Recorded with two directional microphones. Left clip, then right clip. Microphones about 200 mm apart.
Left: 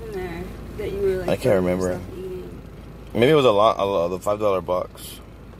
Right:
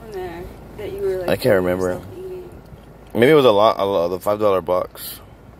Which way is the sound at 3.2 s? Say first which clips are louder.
Right 3 dB; 15° right (ahead or behind).